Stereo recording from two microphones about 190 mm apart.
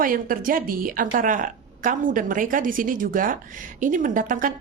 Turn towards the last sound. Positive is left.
turn(degrees=-45)  # may be behind; listen again after turning